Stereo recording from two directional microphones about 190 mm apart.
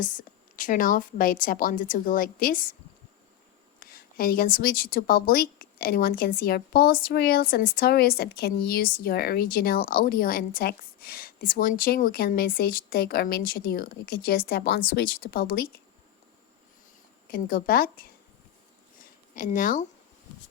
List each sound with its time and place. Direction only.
0.0 s a woman's voice: 45° left (ahead or behind)
3.8 s a woman's voice: 50° left (ahead or behind)
17.2 s a woman's voice: 50° left (ahead or behind)
19.3 s a woman's voice: 40° left (ahead or behind)